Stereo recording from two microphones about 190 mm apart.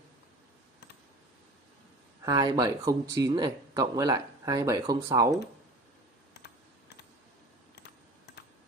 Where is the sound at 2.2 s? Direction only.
20° right (ahead or behind).